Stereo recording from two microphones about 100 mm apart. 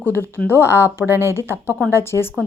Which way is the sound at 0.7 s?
20° right (ahead or behind).